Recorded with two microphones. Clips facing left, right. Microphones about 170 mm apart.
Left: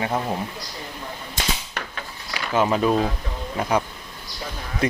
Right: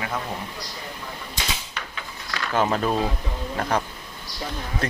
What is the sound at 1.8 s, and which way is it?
Drawer open or close, 55° left (ahead or behind).